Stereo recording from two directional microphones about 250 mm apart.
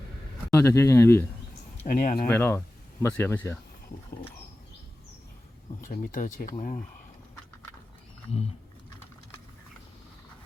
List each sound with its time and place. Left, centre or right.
0.5 s speech: centre
1.8 s speech: left
2.3 s speech: centre
5.9 s speech: left